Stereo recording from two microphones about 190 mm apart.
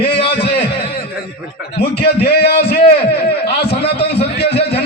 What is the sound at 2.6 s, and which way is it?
Speech, 30° left (ahead or behind).